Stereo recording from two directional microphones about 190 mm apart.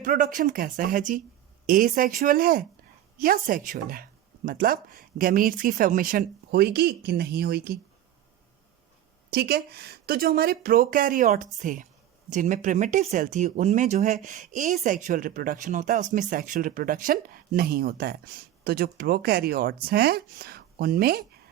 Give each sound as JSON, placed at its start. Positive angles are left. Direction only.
{"t": 0.0, "sound": "speech", "side_deg": -45}
{"t": 9.3, "sound": "speech", "side_deg": -55}